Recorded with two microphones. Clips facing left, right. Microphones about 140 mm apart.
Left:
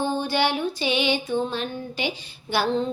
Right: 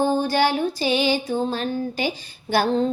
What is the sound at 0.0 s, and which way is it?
Music, 45° right (ahead or behind).